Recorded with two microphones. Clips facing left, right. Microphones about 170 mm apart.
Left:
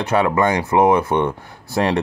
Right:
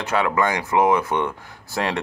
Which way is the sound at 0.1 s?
30° left (ahead or behind).